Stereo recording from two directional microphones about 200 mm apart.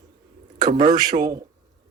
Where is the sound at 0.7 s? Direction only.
40° right (ahead or behind).